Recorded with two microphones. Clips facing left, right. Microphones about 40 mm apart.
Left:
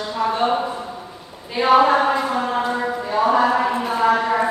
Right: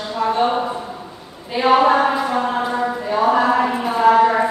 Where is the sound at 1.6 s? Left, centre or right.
Centre.